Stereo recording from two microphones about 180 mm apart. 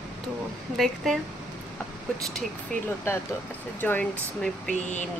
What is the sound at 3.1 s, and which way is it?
Speech, 15° left (ahead or behind).